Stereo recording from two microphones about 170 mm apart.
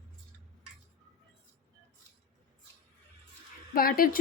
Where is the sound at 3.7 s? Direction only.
60° left (ahead or behind).